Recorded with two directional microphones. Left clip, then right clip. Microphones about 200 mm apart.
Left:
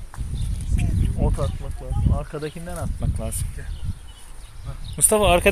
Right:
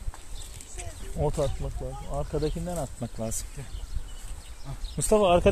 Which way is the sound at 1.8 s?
10° left (ahead or behind).